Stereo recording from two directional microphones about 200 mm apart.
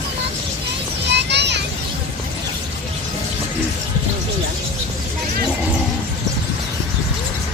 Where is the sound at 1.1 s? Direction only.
60° right (ahead or behind).